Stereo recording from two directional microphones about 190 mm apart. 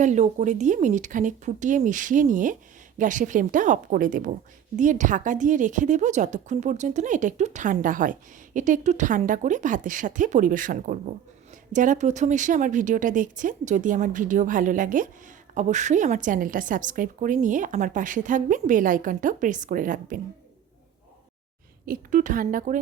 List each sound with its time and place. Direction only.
0.0 s a woman's voice: 40° right (ahead or behind)
21.8 s a woman's voice: 45° right (ahead or behind)